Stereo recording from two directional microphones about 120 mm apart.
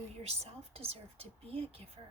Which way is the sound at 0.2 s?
60° right (ahead or behind).